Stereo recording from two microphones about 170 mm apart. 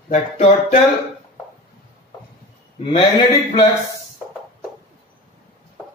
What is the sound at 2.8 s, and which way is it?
Speech, 30° left (ahead or behind).